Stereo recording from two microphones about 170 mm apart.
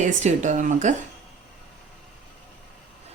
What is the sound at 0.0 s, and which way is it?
Speech, 45° right (ahead or behind).